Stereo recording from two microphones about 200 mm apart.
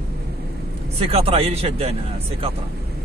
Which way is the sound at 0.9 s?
30° right (ahead or behind).